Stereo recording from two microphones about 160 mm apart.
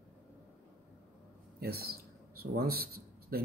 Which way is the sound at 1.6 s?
75° right (ahead or behind).